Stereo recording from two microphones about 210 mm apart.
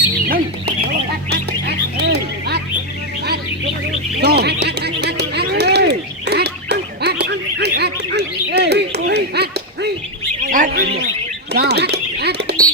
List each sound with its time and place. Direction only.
0.3 s duck: 45° right (ahead or behind)
1.3 s bird: 50° right (ahead or behind)
4.2 s a sound: 50° right (ahead or behind)
10.4 s bird: 40° right (ahead or behind)